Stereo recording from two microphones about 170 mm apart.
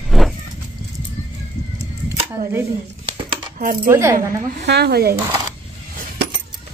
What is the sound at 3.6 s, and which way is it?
Speech, 55° right (ahead or behind).